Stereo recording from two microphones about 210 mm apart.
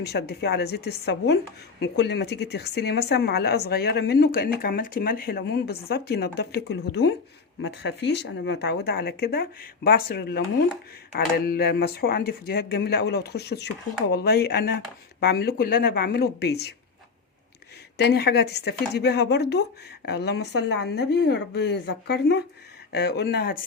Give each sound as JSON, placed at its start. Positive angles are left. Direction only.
{"t": 0.0, "sound": "a woman's voice", "side_deg": 50}
{"t": 17.9, "sound": "a woman's voice", "side_deg": 50}